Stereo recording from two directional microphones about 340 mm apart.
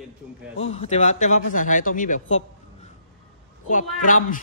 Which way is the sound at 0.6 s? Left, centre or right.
Centre.